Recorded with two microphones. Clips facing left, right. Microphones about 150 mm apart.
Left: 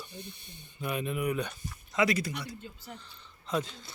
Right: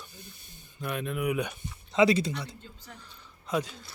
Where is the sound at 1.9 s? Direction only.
25° right (ahead or behind).